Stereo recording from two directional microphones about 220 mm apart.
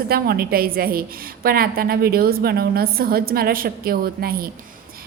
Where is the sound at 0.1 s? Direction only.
45° right (ahead or behind).